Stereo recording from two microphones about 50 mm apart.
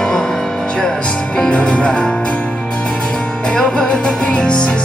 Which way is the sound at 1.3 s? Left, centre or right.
Centre.